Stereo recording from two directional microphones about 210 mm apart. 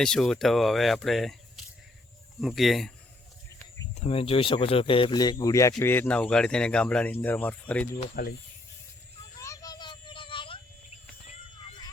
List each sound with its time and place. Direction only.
0.0 s speech: 5° left (ahead or behind)
3.9 s speech: 30° left (ahead or behind); by 7.9 s 5° left (ahead or behind)
8.2 s snake: 45° left (ahead or behind)
9.4 s child singing: 15° left (ahead or behind)